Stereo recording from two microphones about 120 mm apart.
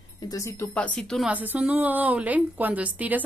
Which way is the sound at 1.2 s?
15° right (ahead or behind).